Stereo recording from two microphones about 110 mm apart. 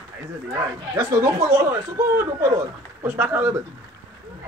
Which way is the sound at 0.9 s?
25° right (ahead or behind).